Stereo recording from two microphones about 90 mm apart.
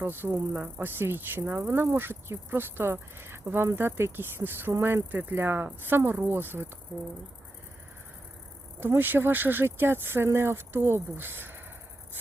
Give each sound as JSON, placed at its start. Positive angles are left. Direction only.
{"t": 0.0, "sound": "speech", "side_deg": -25}
{"t": 8.8, "sound": "speech", "side_deg": -25}